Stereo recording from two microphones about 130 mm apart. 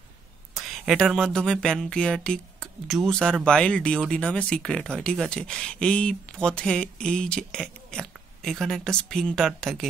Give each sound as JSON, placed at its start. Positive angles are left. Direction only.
{"t": 0.6, "sound": "speech", "side_deg": 0}